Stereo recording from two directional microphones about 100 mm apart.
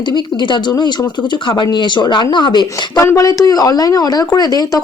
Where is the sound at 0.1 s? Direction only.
45° left (ahead or behind).